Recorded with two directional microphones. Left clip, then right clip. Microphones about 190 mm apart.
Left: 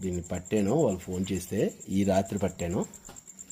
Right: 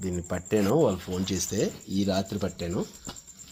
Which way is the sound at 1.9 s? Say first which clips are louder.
Left 2 dB; 40° left (ahead or behind).